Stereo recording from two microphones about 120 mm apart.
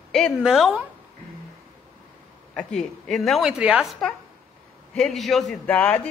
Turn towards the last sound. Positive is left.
turn(degrees=15)  # may be behind; listen again after turning